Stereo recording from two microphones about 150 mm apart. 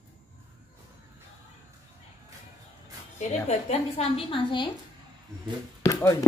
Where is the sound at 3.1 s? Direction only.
45° left (ahead or behind).